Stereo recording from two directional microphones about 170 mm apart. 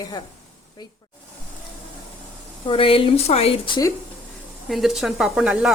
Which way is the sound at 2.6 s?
30° left (ahead or behind).